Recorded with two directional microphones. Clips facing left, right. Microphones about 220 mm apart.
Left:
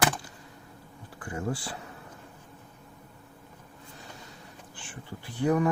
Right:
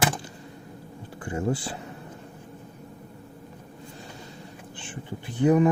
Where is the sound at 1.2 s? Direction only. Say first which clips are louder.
Right 5 dB; 25° right (ahead or behind).